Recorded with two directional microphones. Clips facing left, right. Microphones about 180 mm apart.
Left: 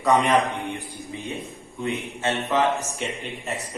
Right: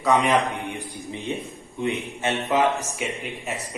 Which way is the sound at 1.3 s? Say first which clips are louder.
Right 4 dB; 25° right (ahead or behind).